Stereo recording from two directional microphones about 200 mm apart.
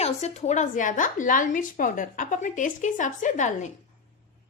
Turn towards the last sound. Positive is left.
turn(degrees=40)  # may be behind; listen again after turning